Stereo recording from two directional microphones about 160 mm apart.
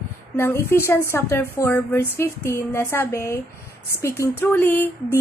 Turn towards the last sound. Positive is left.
turn(degrees=15)  # may be behind; listen again after turning